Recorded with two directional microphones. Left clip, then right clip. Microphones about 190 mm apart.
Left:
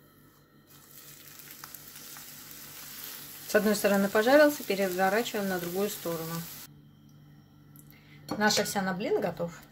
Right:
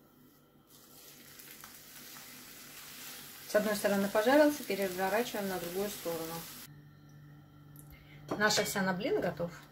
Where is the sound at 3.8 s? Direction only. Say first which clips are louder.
Left 4 dB; 40° left (ahead or behind).